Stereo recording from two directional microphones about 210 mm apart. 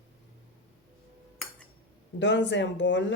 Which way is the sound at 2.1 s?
55° left (ahead or behind).